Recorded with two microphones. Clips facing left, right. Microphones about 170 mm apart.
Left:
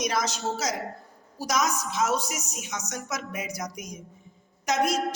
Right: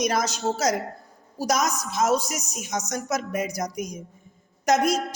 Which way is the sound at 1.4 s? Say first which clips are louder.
Right 3 dB; 45° right (ahead or behind).